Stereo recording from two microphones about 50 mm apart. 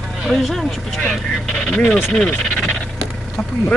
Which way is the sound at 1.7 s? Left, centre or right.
Left.